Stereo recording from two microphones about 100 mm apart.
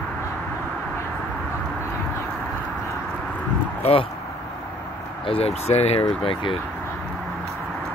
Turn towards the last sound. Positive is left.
turn(degrees=65)  # may be behind; listen again after turning